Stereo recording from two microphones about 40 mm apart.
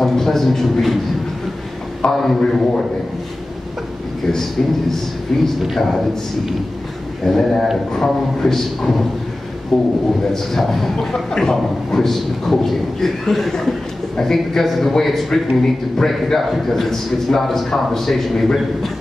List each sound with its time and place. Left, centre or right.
0.0 s speech: centre
2.0 s speech: centre
5.3 s a man's voice: centre
9.7 s a man's voice: centre
10.3 s a man's voice: centre